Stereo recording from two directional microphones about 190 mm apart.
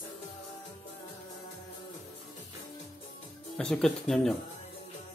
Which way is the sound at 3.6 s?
5° left (ahead or behind).